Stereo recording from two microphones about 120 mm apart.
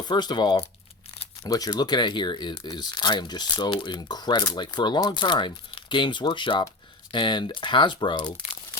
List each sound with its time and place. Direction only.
0.0 s speech: 35° left (ahead or behind)